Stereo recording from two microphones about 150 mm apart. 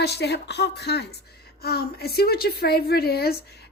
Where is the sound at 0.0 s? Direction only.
90° left.